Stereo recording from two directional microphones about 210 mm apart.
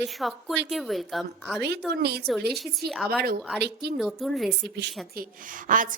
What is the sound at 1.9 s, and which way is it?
Speech, 50° right (ahead or behind).